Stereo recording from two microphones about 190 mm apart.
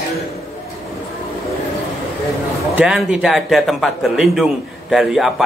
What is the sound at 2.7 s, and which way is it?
A man's voice, 5° right (ahead or behind).